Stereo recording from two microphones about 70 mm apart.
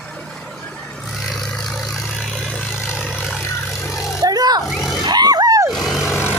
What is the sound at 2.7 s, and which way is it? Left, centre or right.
Vehicle, centre.